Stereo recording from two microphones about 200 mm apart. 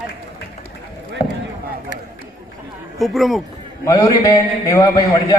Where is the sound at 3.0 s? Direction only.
Centre (ahead or behind).